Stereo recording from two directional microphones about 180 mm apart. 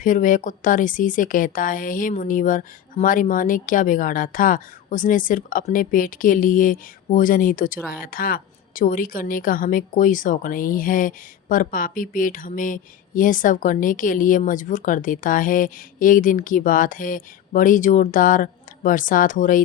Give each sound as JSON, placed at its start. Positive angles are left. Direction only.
{"t": 0.0, "sound": "a woman's voice", "side_deg": 50}